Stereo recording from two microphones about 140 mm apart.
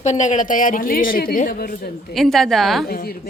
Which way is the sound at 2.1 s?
Centre (ahead or behind).